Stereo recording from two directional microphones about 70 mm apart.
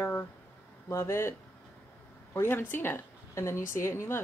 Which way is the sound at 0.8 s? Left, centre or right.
Left.